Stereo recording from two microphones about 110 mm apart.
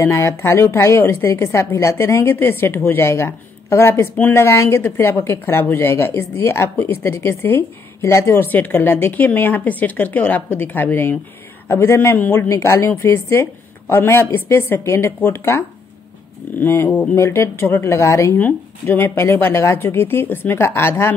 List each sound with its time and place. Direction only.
0.0 s a woman's voice: 25° left (ahead or behind)